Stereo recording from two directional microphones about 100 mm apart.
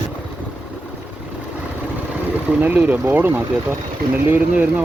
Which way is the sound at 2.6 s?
15° right (ahead or behind).